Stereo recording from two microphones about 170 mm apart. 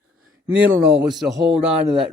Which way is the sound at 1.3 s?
20° right (ahead or behind).